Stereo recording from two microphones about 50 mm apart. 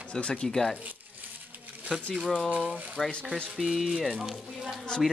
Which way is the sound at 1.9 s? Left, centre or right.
Right.